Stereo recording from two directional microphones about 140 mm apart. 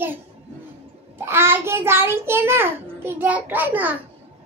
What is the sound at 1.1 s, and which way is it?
A child's voice, 15° right (ahead or behind).